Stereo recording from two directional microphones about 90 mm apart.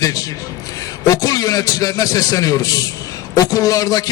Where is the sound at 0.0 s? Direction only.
40° left (ahead or behind).